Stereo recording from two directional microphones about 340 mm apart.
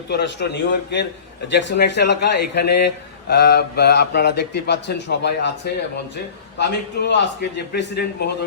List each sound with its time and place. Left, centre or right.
0.1 s a man's voice: left
1.6 s mantra: left
6.6 s a man's voice: left